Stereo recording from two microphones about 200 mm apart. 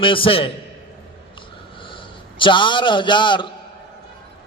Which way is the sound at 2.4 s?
25° left (ahead or behind).